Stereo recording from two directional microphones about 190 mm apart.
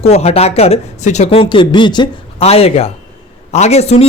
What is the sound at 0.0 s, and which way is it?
Speech, 35° left (ahead or behind).